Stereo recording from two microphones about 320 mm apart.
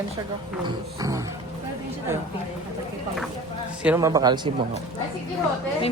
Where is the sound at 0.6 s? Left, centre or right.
Centre.